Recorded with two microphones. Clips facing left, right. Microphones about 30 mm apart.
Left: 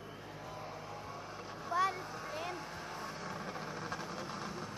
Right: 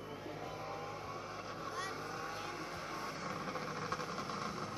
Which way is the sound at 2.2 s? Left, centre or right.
Centre.